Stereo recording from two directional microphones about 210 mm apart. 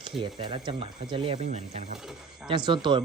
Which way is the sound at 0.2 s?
25° right (ahead or behind).